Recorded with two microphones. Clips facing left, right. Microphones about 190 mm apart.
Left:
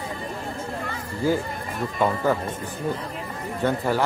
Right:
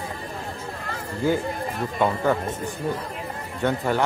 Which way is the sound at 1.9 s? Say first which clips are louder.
Even; centre (ahead or behind).